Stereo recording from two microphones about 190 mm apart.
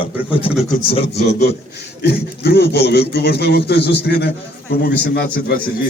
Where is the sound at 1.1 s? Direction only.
60° left (ahead or behind).